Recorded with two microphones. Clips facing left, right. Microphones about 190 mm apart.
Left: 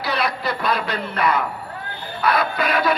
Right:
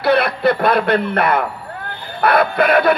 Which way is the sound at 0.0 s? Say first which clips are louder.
Right 9 dB; 60° right (ahead or behind).